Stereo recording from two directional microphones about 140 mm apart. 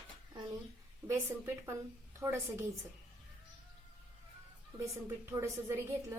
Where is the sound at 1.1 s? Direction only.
20° right (ahead or behind).